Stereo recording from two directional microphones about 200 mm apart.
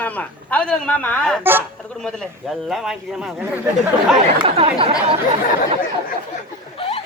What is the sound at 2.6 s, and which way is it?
Speech, centre (ahead or behind).